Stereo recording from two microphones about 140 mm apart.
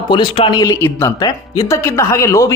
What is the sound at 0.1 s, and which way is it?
Speech, 35° left (ahead or behind).